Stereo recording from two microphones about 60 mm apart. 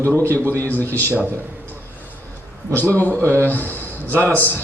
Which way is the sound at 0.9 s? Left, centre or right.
Left.